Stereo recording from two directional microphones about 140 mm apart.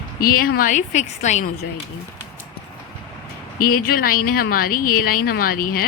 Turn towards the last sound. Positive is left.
turn(degrees=90)